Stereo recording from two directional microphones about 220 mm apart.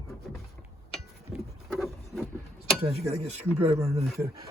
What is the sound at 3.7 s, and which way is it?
Speech, 15° right (ahead or behind).